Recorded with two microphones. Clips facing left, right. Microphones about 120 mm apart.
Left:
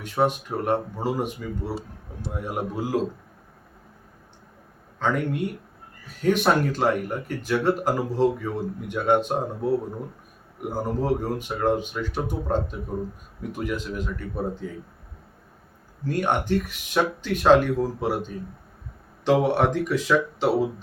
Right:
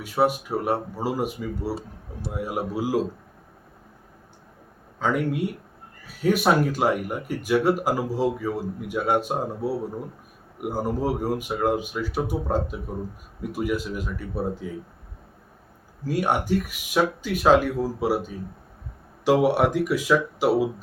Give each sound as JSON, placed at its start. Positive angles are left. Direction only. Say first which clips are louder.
{"t": 0.0, "sound": "speech", "louder": "right 1 dB", "side_deg": -5}
{"t": 4.9, "sound": "speech", "louder": "right 1 dB", "side_deg": -5}
{"t": 16.0, "sound": "speech", "louder": "even", "side_deg": -5}